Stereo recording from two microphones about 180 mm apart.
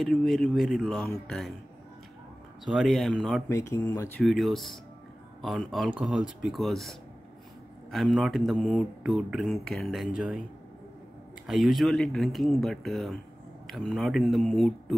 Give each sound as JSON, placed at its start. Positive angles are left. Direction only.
{"t": 0.0, "sound": "speech", "side_deg": 0}
{"t": 2.6, "sound": "speech", "side_deg": 0}
{"t": 3.4, "sound": "speech", "side_deg": 15}
{"t": 4.2, "sound": "speech", "side_deg": 0}
{"t": 11.4, "sound": "speech", "side_deg": 0}